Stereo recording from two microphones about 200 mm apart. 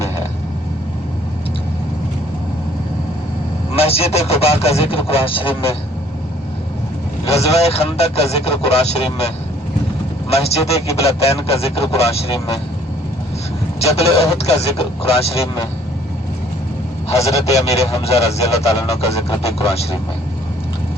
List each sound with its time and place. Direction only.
3.8 s a man's voice: 30° left (ahead or behind)
7.3 s a man's voice: 30° left (ahead or behind)
13.7 s a man's voice: 30° left (ahead or behind)
17.2 s speech: 30° left (ahead or behind)